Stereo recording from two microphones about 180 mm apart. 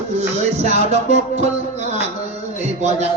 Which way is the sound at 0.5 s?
40° right (ahead or behind).